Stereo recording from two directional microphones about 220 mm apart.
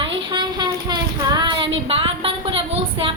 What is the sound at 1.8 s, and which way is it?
A woman's voice, 25° right (ahead or behind).